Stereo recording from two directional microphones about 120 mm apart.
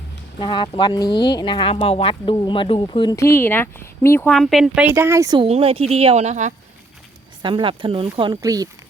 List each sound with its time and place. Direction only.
0.3 s speech: 40° left (ahead or behind)
3.2 s speech: 20° left (ahead or behind)
4.3 s speech: centre (ahead or behind)
4.9 s speech: 20° right (ahead or behind)
5.5 s speech: 55° right (ahead or behind); by 6.5 s 75° right (ahead or behind)
7.4 s speech: 45° right (ahead or behind)
8.4 s speech: 30° right (ahead or behind)